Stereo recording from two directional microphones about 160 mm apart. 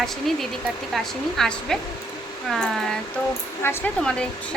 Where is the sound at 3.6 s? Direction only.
15° left (ahead or behind).